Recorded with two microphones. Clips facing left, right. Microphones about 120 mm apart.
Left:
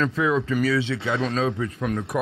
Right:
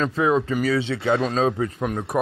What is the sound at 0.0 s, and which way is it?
Speech, 35° right (ahead or behind).